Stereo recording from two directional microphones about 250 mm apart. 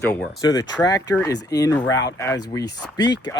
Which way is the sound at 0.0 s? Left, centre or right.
Centre.